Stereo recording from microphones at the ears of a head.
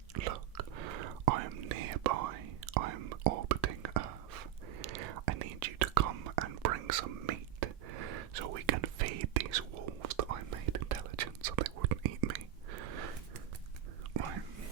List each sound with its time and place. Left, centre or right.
0.1 s whispering: right